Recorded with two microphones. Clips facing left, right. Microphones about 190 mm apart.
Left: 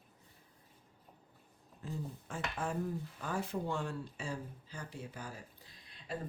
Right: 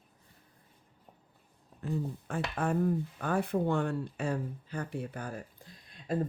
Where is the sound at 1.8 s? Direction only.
60° right (ahead or behind).